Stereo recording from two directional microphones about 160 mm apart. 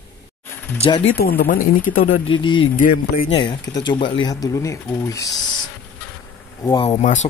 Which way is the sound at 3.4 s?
25° left (ahead or behind).